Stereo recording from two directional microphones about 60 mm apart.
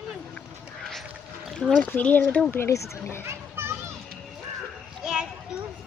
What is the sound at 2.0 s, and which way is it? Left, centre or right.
Speech, left.